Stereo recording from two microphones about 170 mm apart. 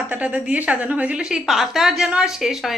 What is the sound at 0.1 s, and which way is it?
A woman's voice, 10° right (ahead or behind).